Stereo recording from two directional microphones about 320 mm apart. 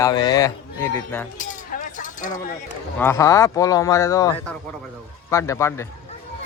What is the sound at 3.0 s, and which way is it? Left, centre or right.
Speech, centre.